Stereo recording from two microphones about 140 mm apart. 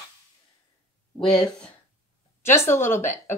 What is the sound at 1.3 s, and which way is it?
Speech, 5° left (ahead or behind).